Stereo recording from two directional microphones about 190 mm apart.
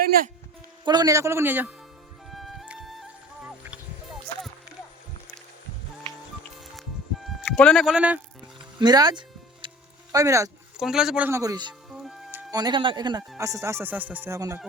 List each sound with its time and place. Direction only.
0.0 s music: 50° right (ahead or behind)
0.9 s speech: 20° right (ahead or behind)
2.3 s music: centre (ahead or behind)
7.4 s speech: 10° left (ahead or behind)
8.8 s music: 20° right (ahead or behind)
10.8 s speech: 5° right (ahead or behind)